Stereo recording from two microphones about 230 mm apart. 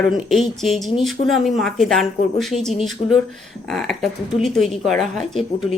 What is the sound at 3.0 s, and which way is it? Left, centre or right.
Speech, left.